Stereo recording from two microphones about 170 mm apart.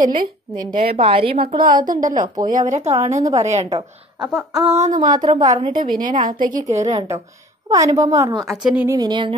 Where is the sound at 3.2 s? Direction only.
20° right (ahead or behind).